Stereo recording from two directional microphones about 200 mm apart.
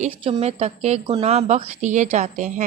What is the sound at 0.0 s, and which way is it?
Speech, 35° right (ahead or behind).